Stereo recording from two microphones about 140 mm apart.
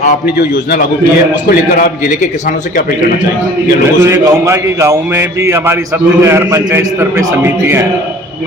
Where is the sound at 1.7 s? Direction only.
65° left (ahead or behind).